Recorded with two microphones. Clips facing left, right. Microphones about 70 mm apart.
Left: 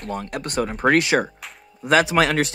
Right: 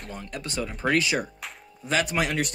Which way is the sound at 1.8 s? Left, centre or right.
Left.